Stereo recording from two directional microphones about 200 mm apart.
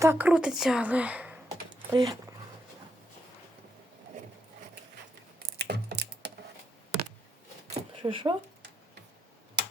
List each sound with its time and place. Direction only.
0.0 s a woman's voice: 10° right (ahead or behind)
1.9 s speech: 20° right (ahead or behind)
5.5 s typing: 55° right (ahead or behind)
7.7 s a sound: 25° right (ahead or behind)
9.6 s tick-tock: 55° right (ahead or behind)